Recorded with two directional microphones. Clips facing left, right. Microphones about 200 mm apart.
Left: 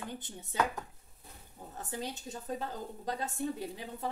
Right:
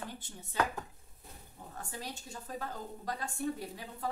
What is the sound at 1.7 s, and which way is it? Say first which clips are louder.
A woman's voice: left 4 dB; 20° left (ahead or behind).